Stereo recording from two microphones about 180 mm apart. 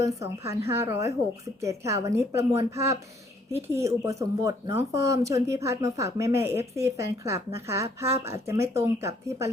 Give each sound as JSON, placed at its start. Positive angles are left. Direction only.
{"t": 0.0, "sound": "a woman's voice", "side_deg": -15}